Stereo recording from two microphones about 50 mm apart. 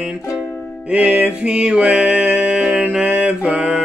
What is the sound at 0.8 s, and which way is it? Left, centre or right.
Music, right.